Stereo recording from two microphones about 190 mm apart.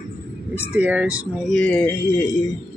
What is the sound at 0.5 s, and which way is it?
Speech, 10° right (ahead or behind).